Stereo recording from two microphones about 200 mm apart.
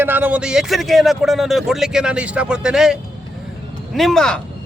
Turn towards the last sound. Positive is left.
turn(degrees=5)  # may be behind; listen again after turning